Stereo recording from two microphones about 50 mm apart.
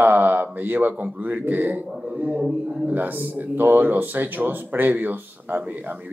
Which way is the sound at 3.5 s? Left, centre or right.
Right.